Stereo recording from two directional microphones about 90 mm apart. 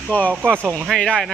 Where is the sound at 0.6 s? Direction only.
25° right (ahead or behind).